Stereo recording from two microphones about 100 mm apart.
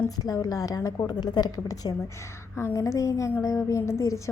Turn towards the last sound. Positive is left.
turn(degrees=30)  # may be behind; listen again after turning